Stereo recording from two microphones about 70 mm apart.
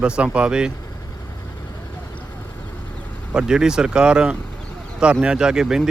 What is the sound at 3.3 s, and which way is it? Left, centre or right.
Speech, centre.